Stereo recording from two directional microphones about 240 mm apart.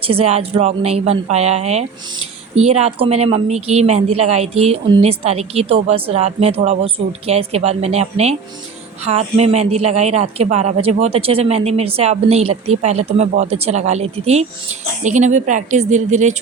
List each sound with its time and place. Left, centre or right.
0.0 s speech: right